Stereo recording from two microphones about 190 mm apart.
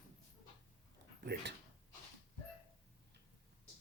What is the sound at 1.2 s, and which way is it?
Speech, 60° right (ahead or behind).